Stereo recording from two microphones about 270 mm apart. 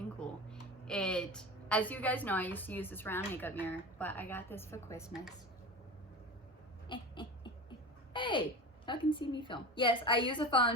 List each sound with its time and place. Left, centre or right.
0.2 s a woman's voice: centre
5.0 s speech: centre
6.8 s a sound: centre
8.9 s a woman's voice: centre